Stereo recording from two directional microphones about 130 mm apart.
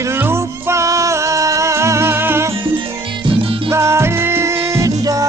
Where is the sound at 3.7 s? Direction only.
20° right (ahead or behind).